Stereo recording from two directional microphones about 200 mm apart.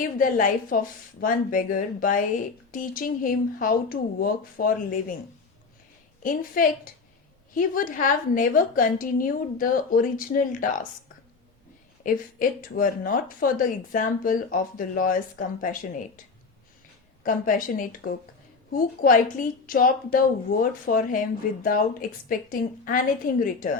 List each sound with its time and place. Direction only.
0.0 s a woman's voice: 40° left (ahead or behind)
6.2 s a woman's voice: 45° left (ahead or behind)
12.0 s a woman's voice: 45° left (ahead or behind)
17.2 s a woman's voice: 40° left (ahead or behind)